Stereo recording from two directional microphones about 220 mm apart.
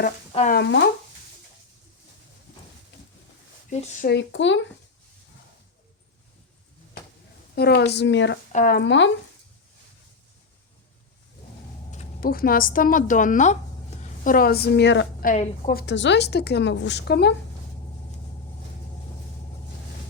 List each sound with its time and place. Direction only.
0.0 s speech: 40° left (ahead or behind)
3.7 s speech: 30° left (ahead or behind)
4.1 s speech: 55° left (ahead or behind)
7.5 s a woman's voice: 45° left (ahead or behind)
8.5 s a woman's voice: 40° left (ahead or behind)
11.9 s a woman's voice: 35° left (ahead or behind)
15.3 s speech: 35° left (ahead or behind)
15.9 s a woman's voice: 50° left (ahead or behind)